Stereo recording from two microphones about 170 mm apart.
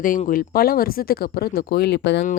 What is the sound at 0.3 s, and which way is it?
Speech, 60° left (ahead or behind).